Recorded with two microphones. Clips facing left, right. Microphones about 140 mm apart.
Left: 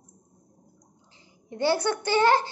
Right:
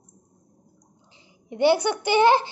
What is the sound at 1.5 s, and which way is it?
Speech, 20° right (ahead or behind).